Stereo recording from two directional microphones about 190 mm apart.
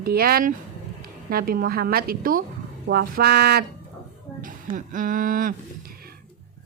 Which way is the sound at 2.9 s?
55° right (ahead or behind).